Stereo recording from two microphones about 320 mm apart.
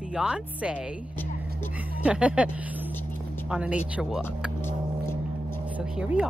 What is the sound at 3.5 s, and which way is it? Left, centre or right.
Speech, centre.